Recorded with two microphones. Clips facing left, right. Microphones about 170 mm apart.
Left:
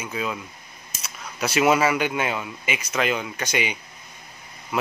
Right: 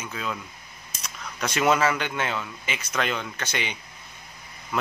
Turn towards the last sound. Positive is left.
turn(degrees=5)  # may be behind; listen again after turning